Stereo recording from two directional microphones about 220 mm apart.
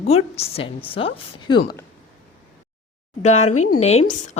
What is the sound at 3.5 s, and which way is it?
Speech, 90° left.